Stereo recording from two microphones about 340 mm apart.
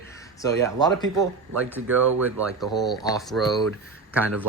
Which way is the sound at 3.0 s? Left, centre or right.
Centre.